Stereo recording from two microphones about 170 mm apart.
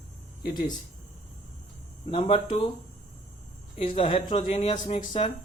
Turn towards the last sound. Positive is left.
turn(degrees=35)  # may be behind; listen again after turning